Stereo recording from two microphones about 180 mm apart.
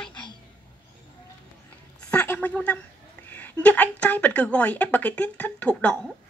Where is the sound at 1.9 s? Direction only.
10° left (ahead or behind).